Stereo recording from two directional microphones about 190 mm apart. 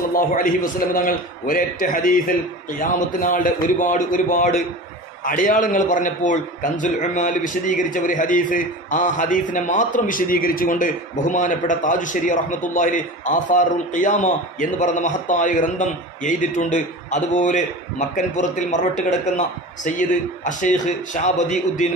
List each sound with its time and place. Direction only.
0.1 s a man's voice: 50° left (ahead or behind)